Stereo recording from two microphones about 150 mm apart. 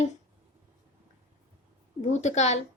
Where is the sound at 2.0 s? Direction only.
50° left (ahead or behind).